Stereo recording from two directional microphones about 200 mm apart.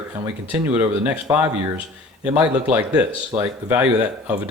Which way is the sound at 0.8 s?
15° right (ahead or behind).